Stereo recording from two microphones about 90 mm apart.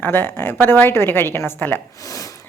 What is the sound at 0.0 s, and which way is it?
Speech, 25° left (ahead or behind).